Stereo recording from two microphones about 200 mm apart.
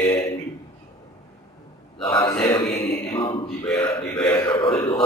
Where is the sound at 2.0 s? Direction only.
20° left (ahead or behind).